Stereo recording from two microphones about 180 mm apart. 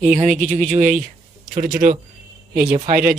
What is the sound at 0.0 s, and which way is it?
Speech, 40° right (ahead or behind).